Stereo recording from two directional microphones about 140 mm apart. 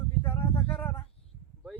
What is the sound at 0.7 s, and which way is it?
Speech, 15° left (ahead or behind).